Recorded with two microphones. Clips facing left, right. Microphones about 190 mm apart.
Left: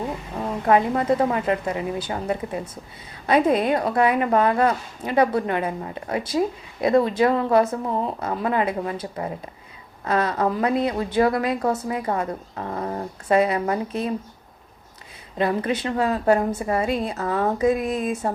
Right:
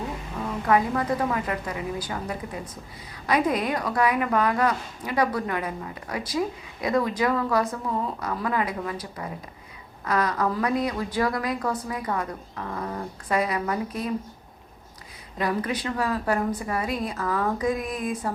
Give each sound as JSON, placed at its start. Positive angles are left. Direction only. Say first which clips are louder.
{"t": 0.3, "sound": "a woman's voice", "louder": "left 3 dB", "side_deg": 35}
{"t": 15.4, "sound": "a woman's voice", "louder": "left 4 dB", "side_deg": 25}